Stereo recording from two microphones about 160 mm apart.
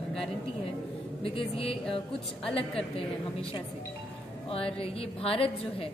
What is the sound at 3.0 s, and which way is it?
A woman's voice, 35° left (ahead or behind).